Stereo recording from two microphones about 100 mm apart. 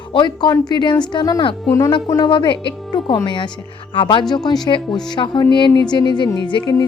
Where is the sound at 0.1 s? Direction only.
50° left (ahead or behind).